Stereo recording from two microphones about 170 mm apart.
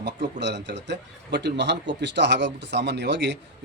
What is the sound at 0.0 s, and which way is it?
Speech, 90° right.